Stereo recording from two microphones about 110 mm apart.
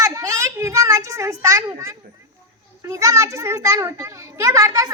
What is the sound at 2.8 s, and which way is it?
A child's voice, 30° right (ahead or behind).